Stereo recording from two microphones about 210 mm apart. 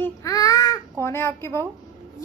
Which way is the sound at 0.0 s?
15° left (ahead or behind).